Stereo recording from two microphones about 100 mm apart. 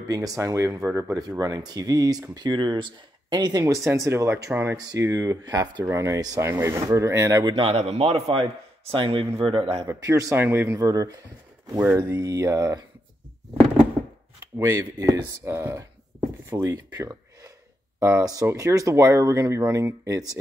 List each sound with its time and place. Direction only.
0.1 s speech: 35° right (ahead or behind)
1.4 s speech: 40° right (ahead or behind)
5.9 s speech: 30° right (ahead or behind)
7.5 s a man's voice: 75° right (ahead or behind)
8.9 s a man's voice: 60° right (ahead or behind)
9.8 s speech: 35° right (ahead or behind)
10.3 s speech: 20° right (ahead or behind)
10.7 s speech: 35° right (ahead or behind)
14.6 s speech: 30° right (ahead or behind)
16.9 s a sound: 30° right (ahead or behind)
18.0 s speech: 35° right (ahead or behind)